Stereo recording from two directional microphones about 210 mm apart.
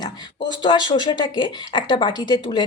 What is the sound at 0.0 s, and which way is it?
A woman's voice, 20° left (ahead or behind).